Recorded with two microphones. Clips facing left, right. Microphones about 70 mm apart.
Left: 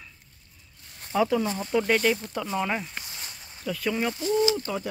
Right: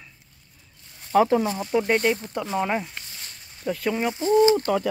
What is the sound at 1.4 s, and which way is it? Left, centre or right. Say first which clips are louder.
Speech: right 3 dB; centre.